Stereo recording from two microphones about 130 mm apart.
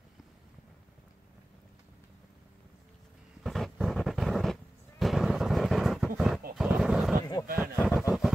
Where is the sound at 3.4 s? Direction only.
Centre (ahead or behind).